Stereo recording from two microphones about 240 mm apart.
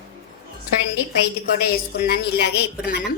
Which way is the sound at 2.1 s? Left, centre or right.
Left.